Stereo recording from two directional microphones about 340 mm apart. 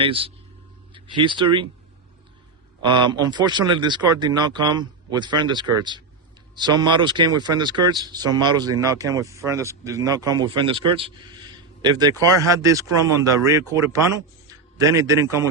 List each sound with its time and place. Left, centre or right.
0.0 s a man's voice: centre
2.8 s a man's voice: centre